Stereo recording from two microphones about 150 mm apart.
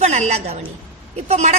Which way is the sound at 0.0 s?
50° right (ahead or behind).